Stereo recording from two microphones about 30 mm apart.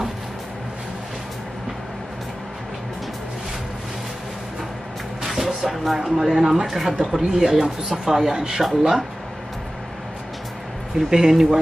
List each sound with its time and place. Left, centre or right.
5.2 s music: centre
5.9 s speech: centre
8.4 s speech: right
8.6 s speech: centre
11.1 s speech: centre